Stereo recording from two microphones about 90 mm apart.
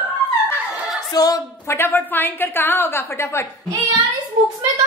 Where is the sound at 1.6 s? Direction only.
25° left (ahead or behind).